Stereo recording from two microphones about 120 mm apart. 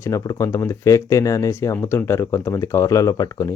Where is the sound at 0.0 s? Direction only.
25° left (ahead or behind).